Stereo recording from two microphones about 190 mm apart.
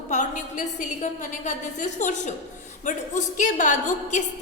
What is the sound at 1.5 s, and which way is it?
A woman's voice, 40° left (ahead or behind).